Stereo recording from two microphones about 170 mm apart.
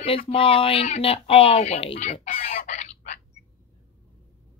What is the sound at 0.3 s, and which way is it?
Speech, 35° left (ahead or behind).